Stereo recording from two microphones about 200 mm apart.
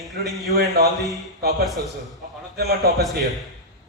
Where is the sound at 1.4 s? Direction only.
50° right (ahead or behind).